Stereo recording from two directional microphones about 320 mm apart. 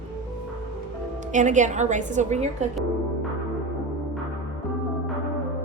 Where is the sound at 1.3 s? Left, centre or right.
Right.